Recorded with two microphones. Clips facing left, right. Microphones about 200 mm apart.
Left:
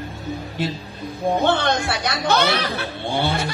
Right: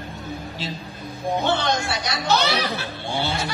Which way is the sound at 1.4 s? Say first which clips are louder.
Left 2 dB; 55° left (ahead or behind).